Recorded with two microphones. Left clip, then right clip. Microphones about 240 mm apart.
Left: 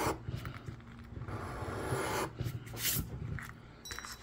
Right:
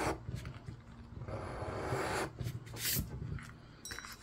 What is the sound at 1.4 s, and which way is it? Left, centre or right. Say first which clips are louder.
Vehicle: left 1 dB; centre.